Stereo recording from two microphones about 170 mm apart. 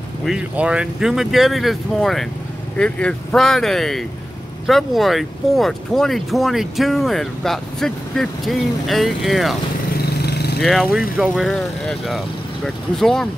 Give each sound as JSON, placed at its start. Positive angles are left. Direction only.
{"t": 0.2, "sound": "speech", "side_deg": -5}
{"t": 9.9, "sound": "vehicle", "side_deg": 70}
{"t": 10.6, "sound": "speech", "side_deg": 0}